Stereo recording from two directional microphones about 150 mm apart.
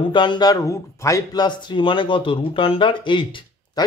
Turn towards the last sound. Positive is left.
turn(degrees=30)  # may be behind; listen again after turning